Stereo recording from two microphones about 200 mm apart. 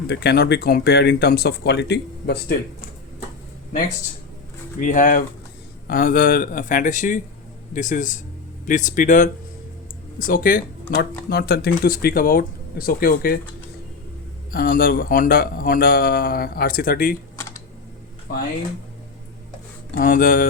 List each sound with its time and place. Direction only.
0.1 s speech: 55° left (ahead or behind)
4.8 s speech: 40° left (ahead or behind)
11.3 s speech: 55° left (ahead or behind)
14.5 s speech: 45° left (ahead or behind)
20.0 s speech: 45° left (ahead or behind)